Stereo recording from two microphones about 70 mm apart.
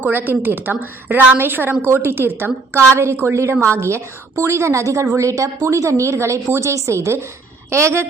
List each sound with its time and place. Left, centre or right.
0.0 s a woman's voice: right